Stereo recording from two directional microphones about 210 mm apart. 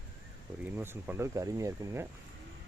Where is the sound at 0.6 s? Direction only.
10° right (ahead or behind).